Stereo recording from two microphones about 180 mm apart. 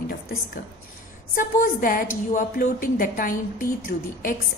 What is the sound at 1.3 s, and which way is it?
A woman's voice, 50° left (ahead or behind).